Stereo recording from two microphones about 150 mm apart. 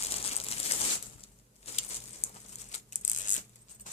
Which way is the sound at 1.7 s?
40° left (ahead or behind).